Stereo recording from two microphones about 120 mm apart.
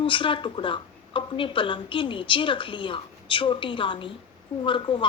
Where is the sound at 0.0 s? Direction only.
45° left (ahead or behind).